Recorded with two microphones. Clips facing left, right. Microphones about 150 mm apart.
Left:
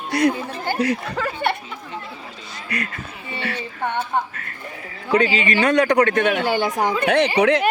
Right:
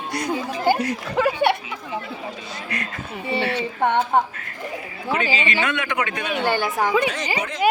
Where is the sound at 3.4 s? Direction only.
25° right (ahead or behind).